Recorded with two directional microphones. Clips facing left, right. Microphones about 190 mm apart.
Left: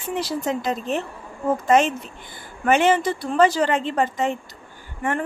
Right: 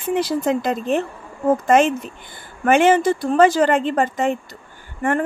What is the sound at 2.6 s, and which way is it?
Speech, 50° right (ahead or behind).